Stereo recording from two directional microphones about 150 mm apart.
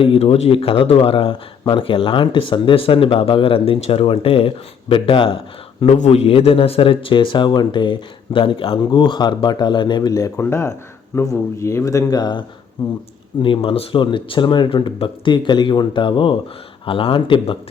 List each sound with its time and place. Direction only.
0.0 s speech: 40° left (ahead or behind)